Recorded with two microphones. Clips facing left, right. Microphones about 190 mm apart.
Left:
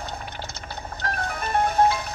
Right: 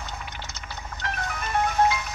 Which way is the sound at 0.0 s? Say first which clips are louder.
Left 3 dB; 35° left (ahead or behind).